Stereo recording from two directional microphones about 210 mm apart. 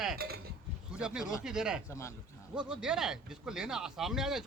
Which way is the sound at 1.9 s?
15° left (ahead or behind).